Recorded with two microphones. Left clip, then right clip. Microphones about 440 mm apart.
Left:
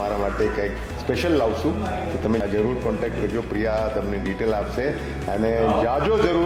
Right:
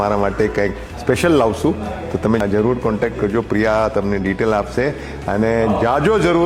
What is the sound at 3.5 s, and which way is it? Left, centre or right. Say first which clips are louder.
Speech: right 7 dB; right.